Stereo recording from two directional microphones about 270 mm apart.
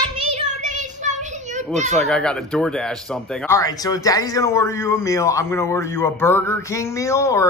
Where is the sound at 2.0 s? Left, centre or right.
Centre.